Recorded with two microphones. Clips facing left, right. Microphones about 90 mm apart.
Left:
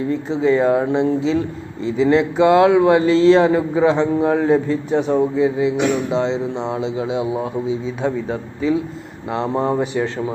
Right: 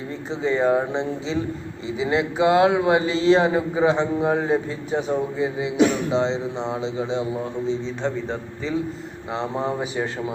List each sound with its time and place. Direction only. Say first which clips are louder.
0.1 s a man's voice: left 6 dB; centre (ahead or behind)
9.5 s speech: left 7 dB; 45° left (ahead or behind)
9.8 s speech: left 5 dB; 5° right (ahead or behind)